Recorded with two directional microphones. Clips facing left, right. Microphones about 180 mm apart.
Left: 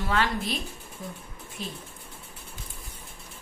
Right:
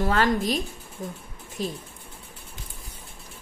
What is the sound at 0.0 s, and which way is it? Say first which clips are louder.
A woman's voice: right 5 dB; 40° right (ahead or behind).